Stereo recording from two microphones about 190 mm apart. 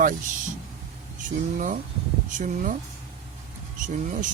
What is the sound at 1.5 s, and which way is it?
Speech, 45° right (ahead or behind).